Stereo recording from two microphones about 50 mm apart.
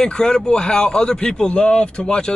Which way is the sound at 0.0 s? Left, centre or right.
Centre.